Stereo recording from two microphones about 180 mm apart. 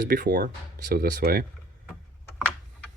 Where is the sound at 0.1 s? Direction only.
55° right (ahead or behind).